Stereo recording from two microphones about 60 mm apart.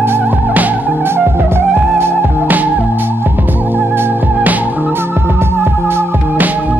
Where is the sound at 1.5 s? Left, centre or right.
Right.